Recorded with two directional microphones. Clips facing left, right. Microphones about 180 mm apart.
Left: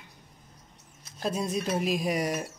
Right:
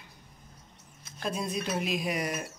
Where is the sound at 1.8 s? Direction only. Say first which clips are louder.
Left 4 dB; 40° left (ahead or behind).